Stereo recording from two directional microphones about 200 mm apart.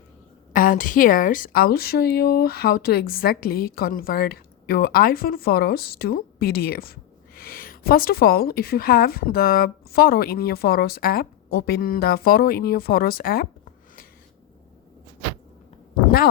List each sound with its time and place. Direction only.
0.5 s a woman's voice: 45° left (ahead or behind)